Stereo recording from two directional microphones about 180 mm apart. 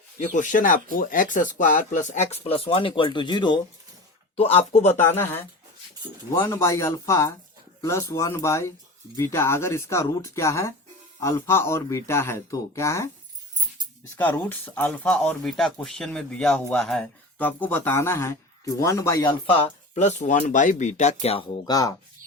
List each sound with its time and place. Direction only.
0.2 s speech: 45° left (ahead or behind)
5.0 s speech: 10° left (ahead or behind)
14.2 s speech: 10° left (ahead or behind); by 21.6 s 35° left (ahead or behind)
21.7 s speech: 20° left (ahead or behind)